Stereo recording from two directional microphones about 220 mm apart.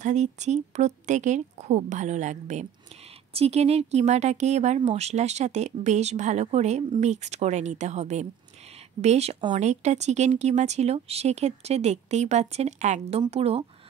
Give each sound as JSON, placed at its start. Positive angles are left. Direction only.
{"t": 0.0, "sound": "a woman's voice", "side_deg": -30}